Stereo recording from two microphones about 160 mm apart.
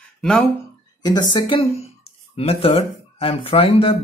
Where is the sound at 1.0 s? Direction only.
25° left (ahead or behind).